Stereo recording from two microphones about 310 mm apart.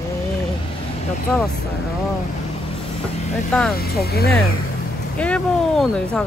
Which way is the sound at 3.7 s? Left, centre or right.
Left.